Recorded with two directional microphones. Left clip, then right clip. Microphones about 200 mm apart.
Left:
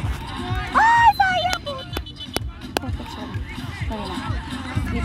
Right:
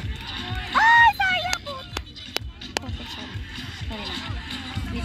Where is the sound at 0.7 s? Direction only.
25° left (ahead or behind).